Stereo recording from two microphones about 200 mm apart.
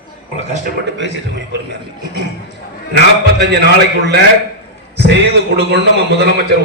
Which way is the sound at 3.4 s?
55° right (ahead or behind).